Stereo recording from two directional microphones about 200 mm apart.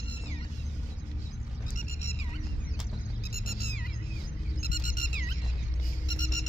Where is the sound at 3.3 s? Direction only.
45° left (ahead or behind).